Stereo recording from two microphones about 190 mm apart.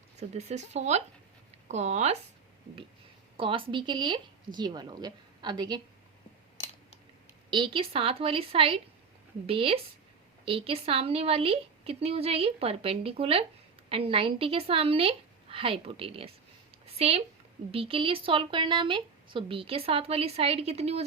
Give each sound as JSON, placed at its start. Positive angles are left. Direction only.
{"t": 0.2, "sound": "speech", "side_deg": -35}
{"t": 3.3, "sound": "speech", "side_deg": -25}
{"t": 7.5, "sound": "speech", "side_deg": -25}